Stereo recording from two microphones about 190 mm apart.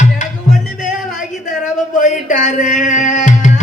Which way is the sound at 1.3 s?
40° left (ahead or behind).